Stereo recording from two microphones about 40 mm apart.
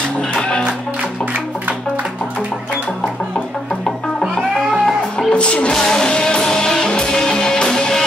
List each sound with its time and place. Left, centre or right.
0.4 s music: left
4.4 s music: centre
5.3 s music: left
5.8 s music: centre